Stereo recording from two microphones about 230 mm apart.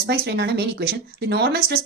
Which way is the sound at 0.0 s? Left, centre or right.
Right.